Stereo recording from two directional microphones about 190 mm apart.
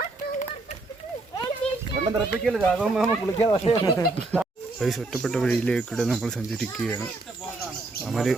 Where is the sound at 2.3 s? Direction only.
Centre (ahead or behind).